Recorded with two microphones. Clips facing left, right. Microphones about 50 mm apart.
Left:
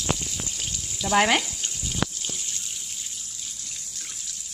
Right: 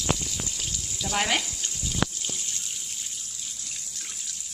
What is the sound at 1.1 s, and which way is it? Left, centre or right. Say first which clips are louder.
Speech: left 6 dB; left.